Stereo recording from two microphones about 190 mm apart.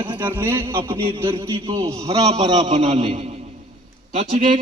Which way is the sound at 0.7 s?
25° right (ahead or behind).